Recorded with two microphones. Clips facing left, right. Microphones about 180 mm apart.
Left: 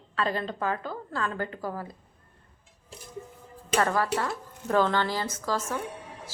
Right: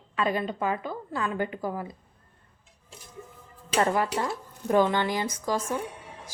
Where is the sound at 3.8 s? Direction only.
20° right (ahead or behind).